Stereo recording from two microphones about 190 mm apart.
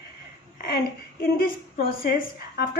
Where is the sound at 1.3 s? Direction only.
50° left (ahead or behind).